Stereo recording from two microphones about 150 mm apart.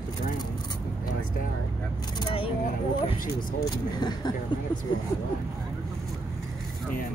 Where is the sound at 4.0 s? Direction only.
30° left (ahead or behind).